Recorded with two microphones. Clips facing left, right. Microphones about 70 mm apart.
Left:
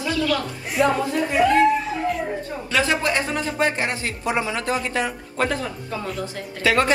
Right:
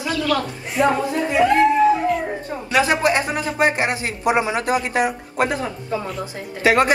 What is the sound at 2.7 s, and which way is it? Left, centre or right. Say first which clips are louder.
A man's voice: right 4 dB; right.